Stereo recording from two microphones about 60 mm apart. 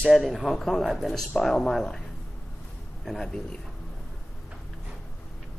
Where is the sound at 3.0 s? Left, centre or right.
Centre.